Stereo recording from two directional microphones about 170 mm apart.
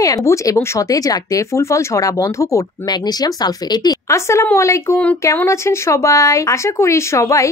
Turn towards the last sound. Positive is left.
turn(degrees=20)  # may be behind; listen again after turning